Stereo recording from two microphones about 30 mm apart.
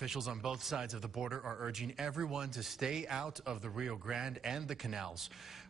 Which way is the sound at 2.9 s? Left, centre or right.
Right.